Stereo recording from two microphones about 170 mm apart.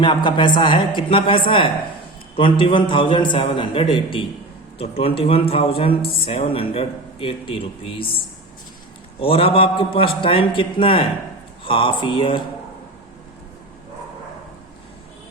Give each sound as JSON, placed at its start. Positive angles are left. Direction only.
{"t": 0.3, "sound": "a man's voice", "side_deg": 25}
{"t": 9.2, "sound": "speech", "side_deg": 35}